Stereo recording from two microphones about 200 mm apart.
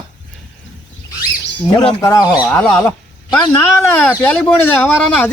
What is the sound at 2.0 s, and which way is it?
Speech, 15° left (ahead or behind).